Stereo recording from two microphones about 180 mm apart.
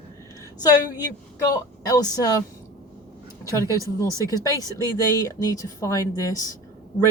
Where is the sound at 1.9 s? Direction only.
20° left (ahead or behind).